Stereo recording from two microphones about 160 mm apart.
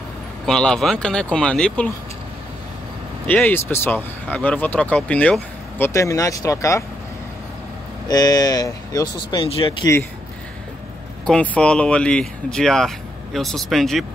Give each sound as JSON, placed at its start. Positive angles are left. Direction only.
{"t": 0.5, "sound": "speech", "side_deg": 5}
{"t": 3.3, "sound": "speech", "side_deg": 10}
{"t": 8.1, "sound": "speech", "side_deg": 25}
{"t": 11.2, "sound": "speech", "side_deg": 5}